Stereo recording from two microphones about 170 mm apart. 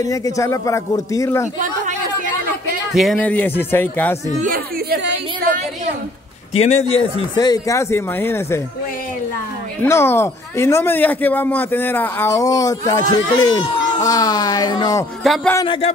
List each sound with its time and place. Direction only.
0.0 s speech: 20° left (ahead or behind)
2.9 s speech: centre (ahead or behind)
4.4 s a sound: 60° right (ahead or behind)
6.5 s a man's voice: 40° left (ahead or behind)
7.3 s speech: 20° left (ahead or behind)
9.8 s a man's voice: 15° left (ahead or behind); by 15.9 s 30° left (ahead or behind)